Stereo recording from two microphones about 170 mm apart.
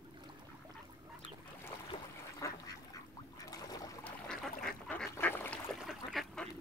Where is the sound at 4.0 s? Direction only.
5° left (ahead or behind).